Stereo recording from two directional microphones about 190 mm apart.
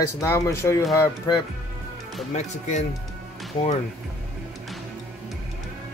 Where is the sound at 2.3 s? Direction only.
40° left (ahead or behind).